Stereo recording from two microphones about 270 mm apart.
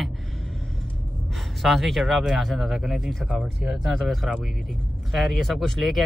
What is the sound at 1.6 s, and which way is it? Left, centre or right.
Speech, centre.